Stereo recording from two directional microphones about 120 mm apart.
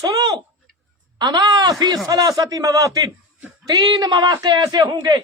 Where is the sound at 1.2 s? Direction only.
35° right (ahead or behind).